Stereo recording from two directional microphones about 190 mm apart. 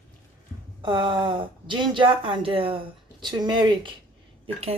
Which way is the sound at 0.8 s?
25° right (ahead or behind).